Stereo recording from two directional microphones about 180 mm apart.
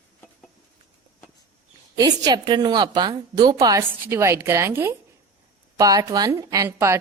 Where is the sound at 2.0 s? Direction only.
20° right (ahead or behind).